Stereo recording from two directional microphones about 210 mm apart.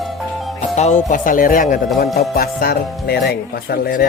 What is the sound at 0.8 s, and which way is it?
Speech, 35° left (ahead or behind).